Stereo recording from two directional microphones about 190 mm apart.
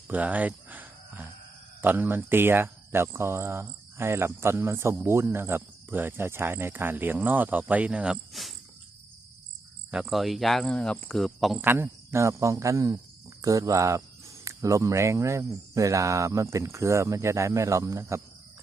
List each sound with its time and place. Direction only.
0.1 s a sound: 10° right (ahead or behind)
1.8 s speech: 10° right (ahead or behind)
9.9 s speech: centre (ahead or behind)
11.6 s speech: 10° right (ahead or behind)